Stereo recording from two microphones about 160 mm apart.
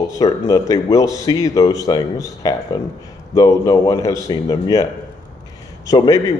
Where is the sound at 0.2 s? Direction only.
20° left (ahead or behind).